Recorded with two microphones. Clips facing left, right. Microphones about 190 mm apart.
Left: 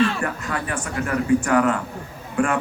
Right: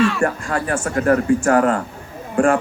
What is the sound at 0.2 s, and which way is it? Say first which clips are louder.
Speech: right 6 dB; 45° right (ahead or behind).